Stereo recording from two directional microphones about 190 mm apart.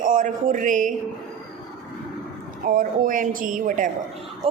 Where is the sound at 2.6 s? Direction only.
45° right (ahead or behind).